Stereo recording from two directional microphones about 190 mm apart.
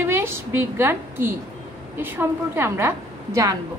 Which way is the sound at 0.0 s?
10° right (ahead or behind).